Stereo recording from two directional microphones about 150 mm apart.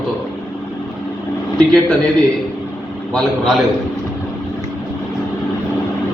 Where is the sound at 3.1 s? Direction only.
5° left (ahead or behind).